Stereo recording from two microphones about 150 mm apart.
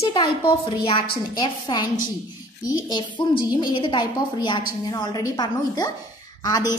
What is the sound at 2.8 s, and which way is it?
A woman's voice, 30° left (ahead or behind).